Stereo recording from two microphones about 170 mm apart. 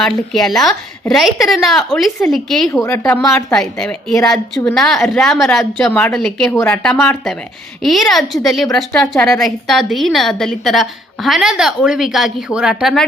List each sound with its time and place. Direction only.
0.3 s a woman's voice: centre (ahead or behind)
2.8 s speech: 15° left (ahead or behind)
3.5 s a woman's voice: 5° left (ahead or behind)